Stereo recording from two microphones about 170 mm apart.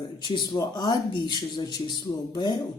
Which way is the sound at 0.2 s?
25° left (ahead or behind).